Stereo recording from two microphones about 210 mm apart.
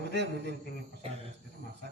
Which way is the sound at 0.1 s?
55° right (ahead or behind).